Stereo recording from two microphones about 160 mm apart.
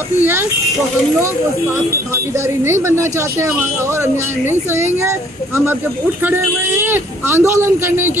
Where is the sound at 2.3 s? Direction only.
15° right (ahead or behind).